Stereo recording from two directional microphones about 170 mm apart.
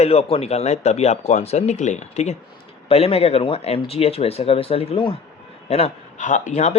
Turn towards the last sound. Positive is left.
turn(degrees=45)  # may be behind; listen again after turning